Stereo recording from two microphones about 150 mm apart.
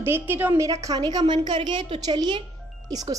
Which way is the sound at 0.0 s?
15° right (ahead or behind).